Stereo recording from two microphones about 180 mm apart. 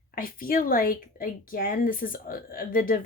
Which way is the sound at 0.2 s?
55° left (ahead or behind).